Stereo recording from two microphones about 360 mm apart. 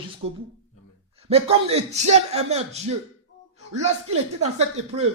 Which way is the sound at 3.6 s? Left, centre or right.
Centre.